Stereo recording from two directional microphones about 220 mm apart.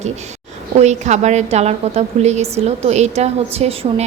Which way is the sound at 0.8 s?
30° right (ahead or behind).